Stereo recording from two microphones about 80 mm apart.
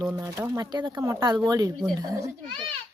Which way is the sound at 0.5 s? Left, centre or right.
Right.